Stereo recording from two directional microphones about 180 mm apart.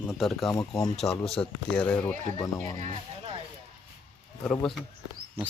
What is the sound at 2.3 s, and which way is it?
Speech, 20° left (ahead or behind).